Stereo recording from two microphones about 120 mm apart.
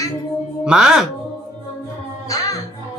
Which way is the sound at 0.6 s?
5° right (ahead or behind).